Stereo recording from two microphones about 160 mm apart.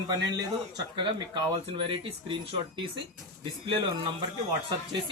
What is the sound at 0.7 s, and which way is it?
Speech, 30° right (ahead or behind).